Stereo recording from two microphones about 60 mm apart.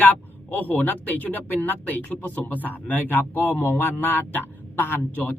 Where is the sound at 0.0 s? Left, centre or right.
Left.